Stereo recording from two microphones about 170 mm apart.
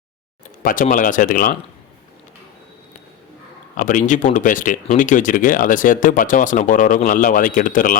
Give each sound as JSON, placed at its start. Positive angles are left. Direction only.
{"t": 0.6, "sound": "speech", "side_deg": 55}
{"t": 3.8, "sound": "speech", "side_deg": 50}